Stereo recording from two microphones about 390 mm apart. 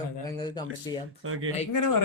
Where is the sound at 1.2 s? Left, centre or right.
Right.